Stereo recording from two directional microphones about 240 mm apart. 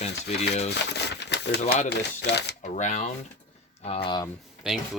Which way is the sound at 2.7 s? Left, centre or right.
Left.